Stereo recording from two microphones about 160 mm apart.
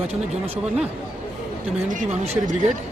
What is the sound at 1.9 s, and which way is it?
Speech, 55° right (ahead or behind).